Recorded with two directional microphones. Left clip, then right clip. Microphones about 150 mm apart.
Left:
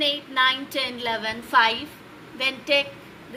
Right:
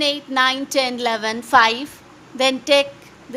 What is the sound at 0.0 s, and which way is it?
A woman's voice, 90° right.